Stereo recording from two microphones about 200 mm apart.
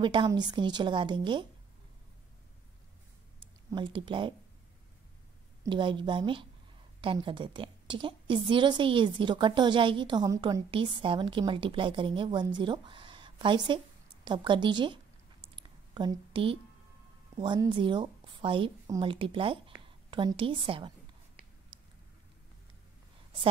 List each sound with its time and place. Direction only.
0.0 s a woman's voice: 25° right (ahead or behind)
3.7 s a woman's voice: 25° right (ahead or behind)
5.7 s a woman's voice: 25° right (ahead or behind)
15.5 s a sound: 20° right (ahead or behind)
17.4 s a woman's voice: 25° right (ahead or behind)